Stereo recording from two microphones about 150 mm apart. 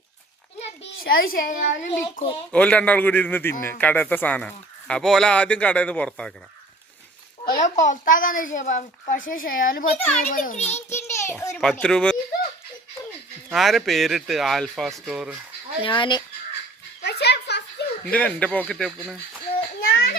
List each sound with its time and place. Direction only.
1.0 s a woman's voice: 80° left; by 1.9 s 60° left (ahead or behind)
1.9 s a child's voice: 40° left (ahead or behind)
2.5 s a man's voice: 10° left (ahead or behind)
7.5 s a woman's voice: 55° left (ahead or behind)
10.2 s a child's voice: 60° left (ahead or behind)
10.8 s a sound: 15° left (ahead or behind)
11.5 s speech: 5° left (ahead or behind)
13.5 s speech: centre (ahead or behind)
15.8 s a child's voice: 35° left (ahead or behind)
17.0 s a sound: 90° left
18.0 s a man's voice: 5° left (ahead or behind)